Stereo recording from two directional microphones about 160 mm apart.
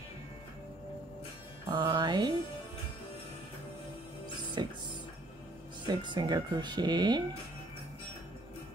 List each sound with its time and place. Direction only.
1.7 s speech: 30° right (ahead or behind)
4.6 s speech: 25° right (ahead or behind)
5.9 s speech: 30° right (ahead or behind)